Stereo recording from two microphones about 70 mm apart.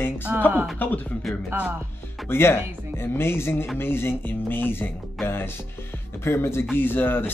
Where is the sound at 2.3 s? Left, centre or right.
Left.